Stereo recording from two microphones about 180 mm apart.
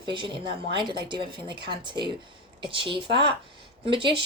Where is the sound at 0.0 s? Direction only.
25° right (ahead or behind).